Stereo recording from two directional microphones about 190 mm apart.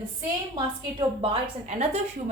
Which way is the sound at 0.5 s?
25° right (ahead or behind).